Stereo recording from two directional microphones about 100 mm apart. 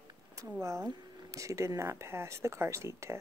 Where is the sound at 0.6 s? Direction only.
30° right (ahead or behind).